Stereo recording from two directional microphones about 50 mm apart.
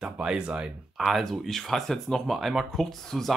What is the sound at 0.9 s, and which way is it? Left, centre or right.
Speech, centre.